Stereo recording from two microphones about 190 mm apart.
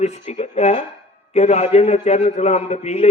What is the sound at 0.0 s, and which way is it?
A man's voice, 35° left (ahead or behind).